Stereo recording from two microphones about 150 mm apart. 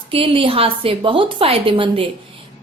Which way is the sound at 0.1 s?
35° right (ahead or behind).